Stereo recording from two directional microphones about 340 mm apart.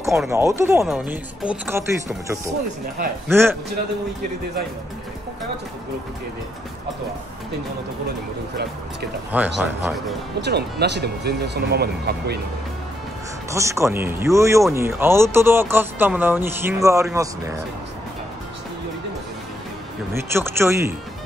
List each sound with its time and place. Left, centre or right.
0.0 s speech: centre
9.6 s speech: centre
10.4 s speech: right
13.5 s speech: centre
20.2 s speech: centre